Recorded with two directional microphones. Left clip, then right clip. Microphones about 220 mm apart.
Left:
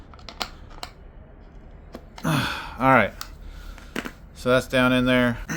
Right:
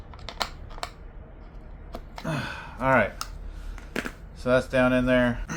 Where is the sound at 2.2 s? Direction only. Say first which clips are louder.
Left 7 dB; 50° left (ahead or behind).